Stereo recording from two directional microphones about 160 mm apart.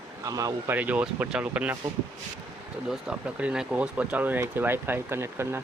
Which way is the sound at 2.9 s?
5° right (ahead or behind).